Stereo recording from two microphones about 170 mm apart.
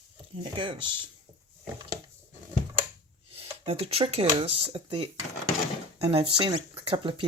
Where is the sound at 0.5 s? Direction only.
30° right (ahead or behind).